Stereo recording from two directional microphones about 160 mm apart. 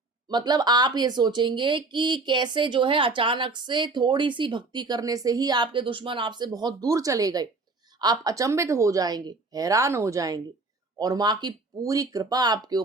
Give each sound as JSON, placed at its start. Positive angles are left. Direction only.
{"t": 0.3, "sound": "speech", "side_deg": -25}